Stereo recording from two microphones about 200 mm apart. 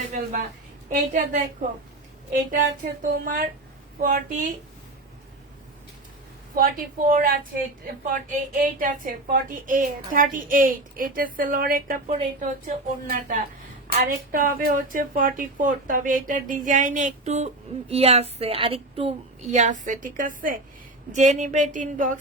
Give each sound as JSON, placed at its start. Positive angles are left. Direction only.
{"t": 0.1, "sound": "a woman's voice", "side_deg": -40}
{"t": 3.0, "sound": "a woman's voice", "side_deg": -45}
{"t": 6.5, "sound": "a woman's voice", "side_deg": -45}